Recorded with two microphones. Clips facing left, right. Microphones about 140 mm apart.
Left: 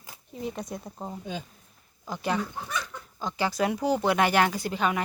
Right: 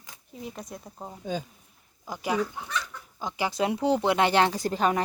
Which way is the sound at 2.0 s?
10° right (ahead or behind).